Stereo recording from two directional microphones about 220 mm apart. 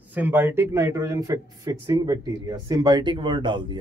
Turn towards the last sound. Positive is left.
turn(degrees=-20)  # may be behind; listen again after turning